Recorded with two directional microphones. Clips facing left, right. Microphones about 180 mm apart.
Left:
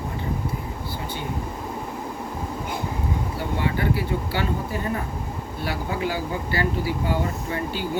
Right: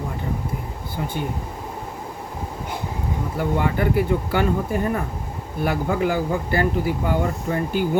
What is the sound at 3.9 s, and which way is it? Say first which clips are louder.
Speech: right 5 dB; 50° right (ahead or behind).